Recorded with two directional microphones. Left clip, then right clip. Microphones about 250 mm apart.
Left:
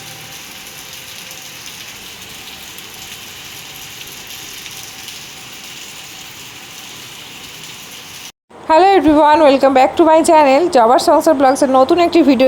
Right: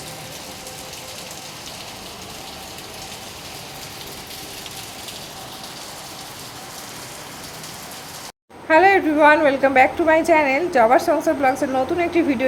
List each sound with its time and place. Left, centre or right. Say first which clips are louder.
8.6 s a woman's voice: left 5 dB; left